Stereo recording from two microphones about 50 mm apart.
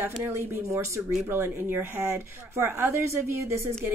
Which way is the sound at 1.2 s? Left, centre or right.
Right.